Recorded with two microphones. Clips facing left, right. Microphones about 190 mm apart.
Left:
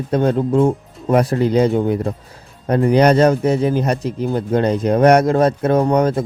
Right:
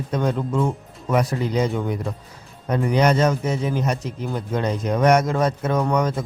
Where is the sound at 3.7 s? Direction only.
35° left (ahead or behind).